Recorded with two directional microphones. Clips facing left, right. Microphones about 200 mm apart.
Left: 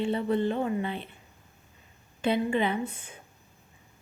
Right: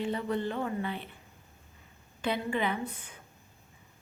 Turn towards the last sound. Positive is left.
turn(degrees=25)  # may be behind; listen again after turning